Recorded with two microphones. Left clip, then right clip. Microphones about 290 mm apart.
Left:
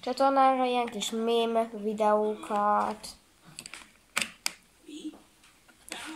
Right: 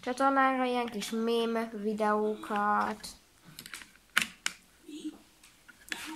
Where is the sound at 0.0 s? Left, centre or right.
Centre.